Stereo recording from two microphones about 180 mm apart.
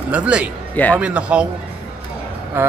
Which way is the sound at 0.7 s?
10° left (ahead or behind).